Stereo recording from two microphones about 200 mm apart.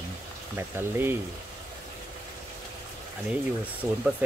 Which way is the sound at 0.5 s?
10° right (ahead or behind).